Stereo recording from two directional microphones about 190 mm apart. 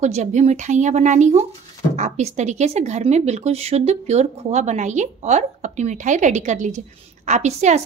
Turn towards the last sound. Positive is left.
turn(degrees=-35)  # may be behind; listen again after turning